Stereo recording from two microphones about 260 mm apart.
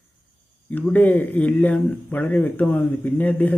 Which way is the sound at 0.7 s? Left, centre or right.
Centre.